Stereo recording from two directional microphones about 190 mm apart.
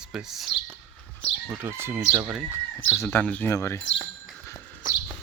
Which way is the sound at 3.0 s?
10° left (ahead or behind).